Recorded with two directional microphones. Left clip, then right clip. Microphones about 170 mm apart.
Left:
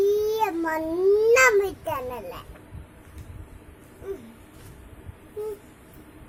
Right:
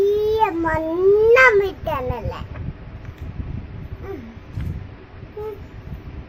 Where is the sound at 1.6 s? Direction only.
15° left (ahead or behind).